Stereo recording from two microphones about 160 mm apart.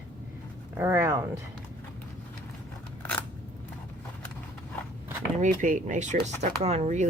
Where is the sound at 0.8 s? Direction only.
15° right (ahead or behind).